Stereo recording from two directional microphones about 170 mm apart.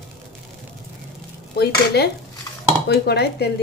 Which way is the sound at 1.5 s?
70° left (ahead or behind).